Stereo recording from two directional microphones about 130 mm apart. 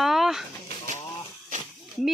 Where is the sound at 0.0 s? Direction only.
5° right (ahead or behind).